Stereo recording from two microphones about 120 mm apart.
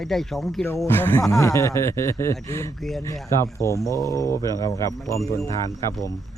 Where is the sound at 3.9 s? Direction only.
30° right (ahead or behind).